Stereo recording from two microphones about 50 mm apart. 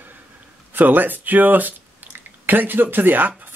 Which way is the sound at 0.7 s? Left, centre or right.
Right.